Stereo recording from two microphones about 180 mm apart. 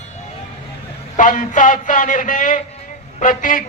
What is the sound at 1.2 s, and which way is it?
A woman's voice, 45° left (ahead or behind).